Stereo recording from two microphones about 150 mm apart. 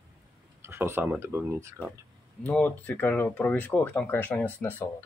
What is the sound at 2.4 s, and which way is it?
Speech, 10° left (ahead or behind).